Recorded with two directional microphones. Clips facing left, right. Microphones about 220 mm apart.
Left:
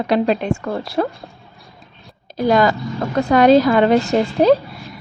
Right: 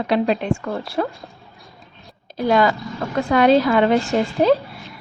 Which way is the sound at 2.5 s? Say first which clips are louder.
Left 2 dB; 40° left (ahead or behind).